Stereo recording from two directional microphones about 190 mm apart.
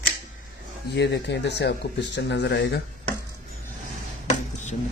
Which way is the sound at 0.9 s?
60° left (ahead or behind).